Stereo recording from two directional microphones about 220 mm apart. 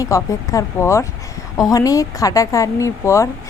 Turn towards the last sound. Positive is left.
turn(degrees=15)  # may be behind; listen again after turning